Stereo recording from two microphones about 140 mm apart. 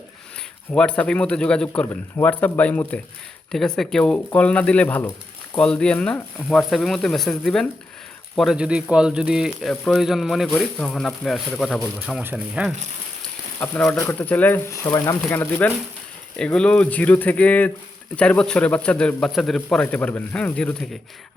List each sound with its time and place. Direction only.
0.3 s a man's voice: 5° left (ahead or behind); by 12.7 s 10° right (ahead or behind)
13.6 s speech: 10° left (ahead or behind)
15.4 s speech: 15° left (ahead or behind)